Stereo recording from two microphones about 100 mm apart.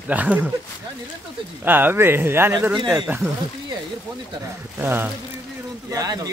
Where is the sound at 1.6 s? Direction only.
20° right (ahead or behind).